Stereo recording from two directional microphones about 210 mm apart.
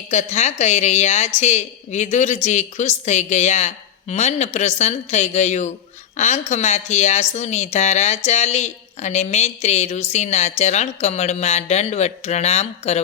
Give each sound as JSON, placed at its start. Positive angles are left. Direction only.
{"t": 0.1, "sound": "a woman's voice", "side_deg": 30}